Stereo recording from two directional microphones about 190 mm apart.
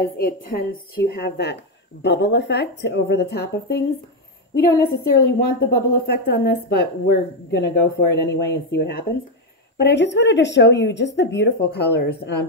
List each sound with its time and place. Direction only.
0.0 s a woman's voice: 50° left (ahead or behind)
5.1 s a woman's voice: 55° left (ahead or behind)